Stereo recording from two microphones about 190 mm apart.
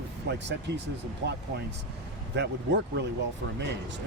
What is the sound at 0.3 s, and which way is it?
Speech, 65° right (ahead or behind).